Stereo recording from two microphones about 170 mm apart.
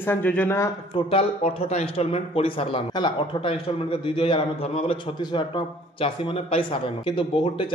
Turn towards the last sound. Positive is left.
turn(degrees=30)  # may be behind; listen again after turning